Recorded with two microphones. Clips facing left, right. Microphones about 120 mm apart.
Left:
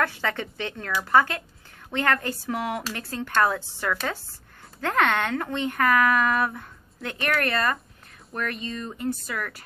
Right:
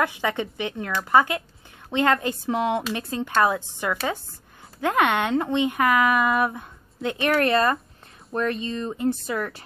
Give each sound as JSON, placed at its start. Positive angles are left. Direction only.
{"t": 0.0, "sound": "speech", "side_deg": -15}